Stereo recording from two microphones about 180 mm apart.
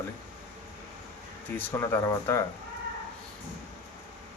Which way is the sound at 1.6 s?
10° left (ahead or behind).